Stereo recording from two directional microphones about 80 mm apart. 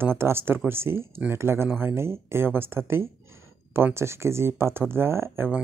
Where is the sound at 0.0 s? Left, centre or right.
Right.